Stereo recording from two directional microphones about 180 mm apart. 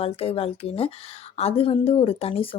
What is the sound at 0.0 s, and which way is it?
Speech, 35° left (ahead or behind).